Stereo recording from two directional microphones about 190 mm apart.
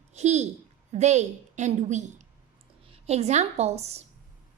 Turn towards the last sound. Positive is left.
turn(degrees=-35)  # may be behind; listen again after turning